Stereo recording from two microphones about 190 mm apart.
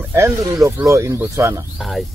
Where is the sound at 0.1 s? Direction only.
15° right (ahead or behind).